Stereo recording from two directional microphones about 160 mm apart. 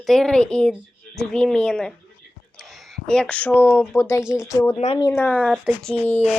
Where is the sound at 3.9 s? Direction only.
15° left (ahead or behind).